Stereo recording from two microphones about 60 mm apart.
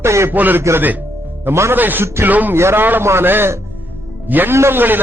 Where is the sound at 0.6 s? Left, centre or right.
Right.